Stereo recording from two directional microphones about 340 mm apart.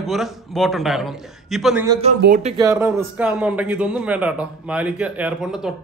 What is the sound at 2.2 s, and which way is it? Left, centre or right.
Speech, right.